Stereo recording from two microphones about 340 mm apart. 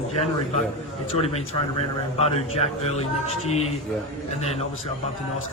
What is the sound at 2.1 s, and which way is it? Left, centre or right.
A man's voice, centre.